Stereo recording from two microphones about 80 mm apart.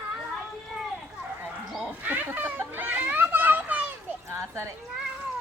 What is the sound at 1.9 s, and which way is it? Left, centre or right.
Children playing, right.